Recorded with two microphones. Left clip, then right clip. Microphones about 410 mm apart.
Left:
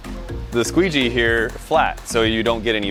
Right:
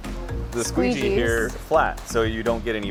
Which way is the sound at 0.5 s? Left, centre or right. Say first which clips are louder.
Left 6 dB; left.